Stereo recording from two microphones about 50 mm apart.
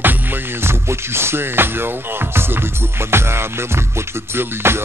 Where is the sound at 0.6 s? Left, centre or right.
Right.